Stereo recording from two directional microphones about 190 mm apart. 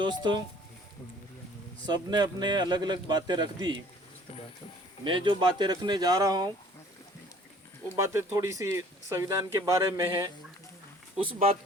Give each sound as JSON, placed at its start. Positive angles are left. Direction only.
{"t": 0.0, "sound": "speech", "side_deg": -25}
{"t": 1.9, "sound": "speech", "side_deg": -20}
{"t": 5.0, "sound": "speech", "side_deg": -25}
{"t": 7.9, "sound": "speech", "side_deg": -15}